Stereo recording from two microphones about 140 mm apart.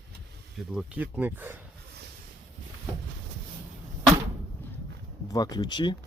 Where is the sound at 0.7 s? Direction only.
5° right (ahead or behind).